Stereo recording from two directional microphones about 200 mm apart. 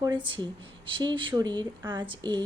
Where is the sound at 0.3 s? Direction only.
25° right (ahead or behind).